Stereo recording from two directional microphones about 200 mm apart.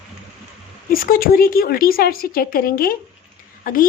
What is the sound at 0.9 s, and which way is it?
Speech, 45° left (ahead or behind).